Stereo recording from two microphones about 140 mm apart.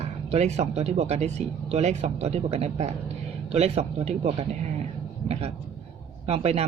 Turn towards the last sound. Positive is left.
turn(degrees=-45)  # may be behind; listen again after turning